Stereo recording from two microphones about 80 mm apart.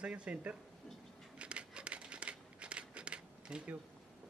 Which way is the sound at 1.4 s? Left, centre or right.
Centre.